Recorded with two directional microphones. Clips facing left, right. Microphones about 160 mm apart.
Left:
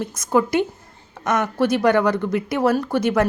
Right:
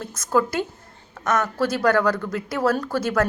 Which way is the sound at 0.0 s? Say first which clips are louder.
Left 2 dB; 20° left (ahead or behind).